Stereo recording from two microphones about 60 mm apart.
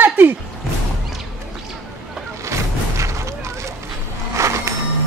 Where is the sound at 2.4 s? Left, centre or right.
Right.